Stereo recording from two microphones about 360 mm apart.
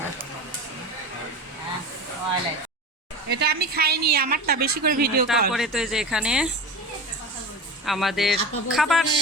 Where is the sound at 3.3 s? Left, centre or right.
Right.